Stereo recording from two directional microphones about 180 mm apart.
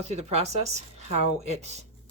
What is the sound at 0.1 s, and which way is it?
Speech, 35° right (ahead or behind).